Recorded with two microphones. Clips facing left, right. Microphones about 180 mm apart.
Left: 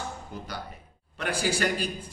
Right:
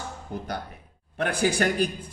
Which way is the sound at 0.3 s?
55° right (ahead or behind).